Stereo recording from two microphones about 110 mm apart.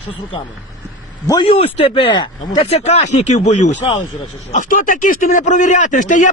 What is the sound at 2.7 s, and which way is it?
Speech, 75° left (ahead or behind).